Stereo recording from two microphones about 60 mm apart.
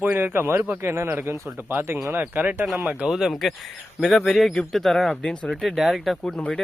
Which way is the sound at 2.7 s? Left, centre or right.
Centre.